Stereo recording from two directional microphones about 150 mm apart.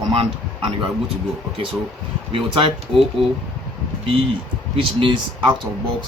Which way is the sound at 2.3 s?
35° right (ahead or behind).